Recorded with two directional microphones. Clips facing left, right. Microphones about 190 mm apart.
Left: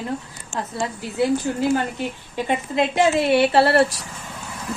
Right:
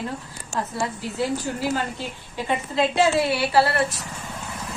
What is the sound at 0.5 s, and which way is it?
Speech, 35° right (ahead or behind).